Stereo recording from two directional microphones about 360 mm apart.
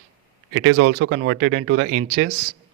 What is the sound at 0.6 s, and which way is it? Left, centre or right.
Speech, right.